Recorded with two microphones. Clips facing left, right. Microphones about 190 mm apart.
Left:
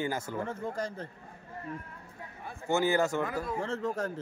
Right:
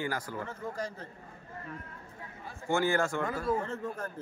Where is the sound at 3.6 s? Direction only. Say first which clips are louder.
Left 4 dB; 80° left.